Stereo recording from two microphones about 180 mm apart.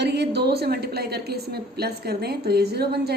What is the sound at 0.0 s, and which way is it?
A woman's voice, 70° right (ahead or behind).